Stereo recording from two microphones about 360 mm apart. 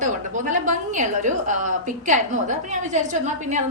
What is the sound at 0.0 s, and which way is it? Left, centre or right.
A woman's voice, right.